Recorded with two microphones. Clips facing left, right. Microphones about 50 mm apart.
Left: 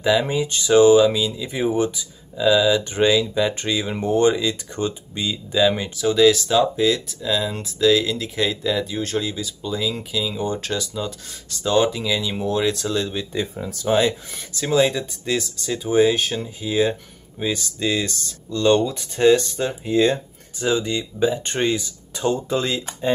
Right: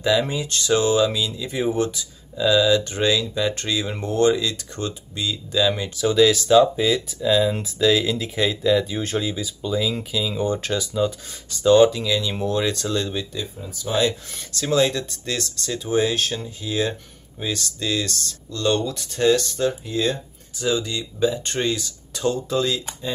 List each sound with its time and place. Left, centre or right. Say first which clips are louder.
0.0 s speech: left 2 dB; centre
5.9 s speech: left 1 dB; centre
13.6 s speech: left 6 dB; left
14.0 s speech: left 1 dB; centre
19.8 s speech: left 5 dB; left